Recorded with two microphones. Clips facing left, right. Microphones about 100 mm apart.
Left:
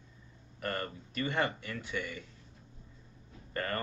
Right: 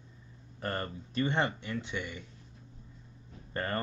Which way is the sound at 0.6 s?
30° right (ahead or behind).